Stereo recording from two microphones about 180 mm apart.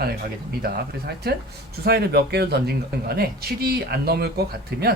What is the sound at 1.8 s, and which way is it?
Speech, 60° right (ahead or behind).